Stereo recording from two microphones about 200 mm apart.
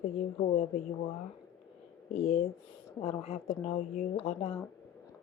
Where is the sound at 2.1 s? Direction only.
30° left (ahead or behind).